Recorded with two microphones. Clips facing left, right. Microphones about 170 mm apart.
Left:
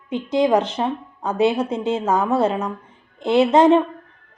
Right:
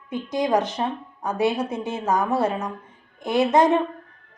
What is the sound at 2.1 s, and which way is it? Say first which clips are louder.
Speech: left 1 dB; 15° right (ahead or behind).